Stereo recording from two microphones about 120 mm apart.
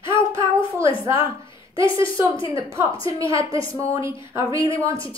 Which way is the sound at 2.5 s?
25° right (ahead or behind).